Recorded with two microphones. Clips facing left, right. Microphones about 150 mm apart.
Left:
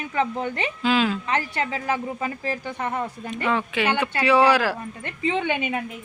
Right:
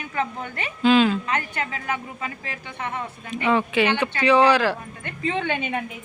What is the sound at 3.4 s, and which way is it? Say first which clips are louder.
A woman's voice: right 3 dB; centre (ahead or behind).